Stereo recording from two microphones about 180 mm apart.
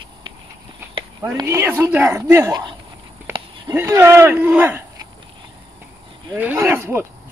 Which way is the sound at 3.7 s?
15° right (ahead or behind).